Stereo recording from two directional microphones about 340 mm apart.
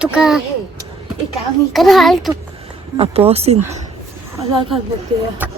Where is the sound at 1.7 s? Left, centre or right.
Centre.